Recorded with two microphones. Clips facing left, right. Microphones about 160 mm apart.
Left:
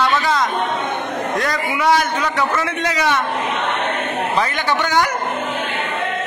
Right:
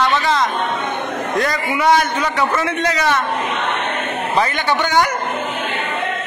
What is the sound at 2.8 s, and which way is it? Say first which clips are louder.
Speech: even; 10° left (ahead or behind).